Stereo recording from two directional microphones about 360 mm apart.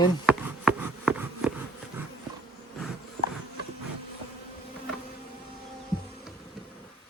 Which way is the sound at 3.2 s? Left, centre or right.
Centre.